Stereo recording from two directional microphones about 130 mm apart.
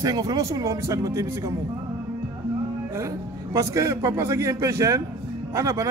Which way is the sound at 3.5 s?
25° right (ahead or behind).